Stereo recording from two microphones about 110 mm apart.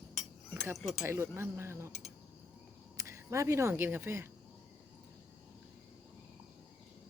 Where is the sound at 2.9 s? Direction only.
25° right (ahead or behind).